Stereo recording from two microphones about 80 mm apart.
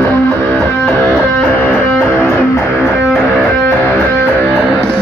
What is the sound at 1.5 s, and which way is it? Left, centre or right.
Music, left.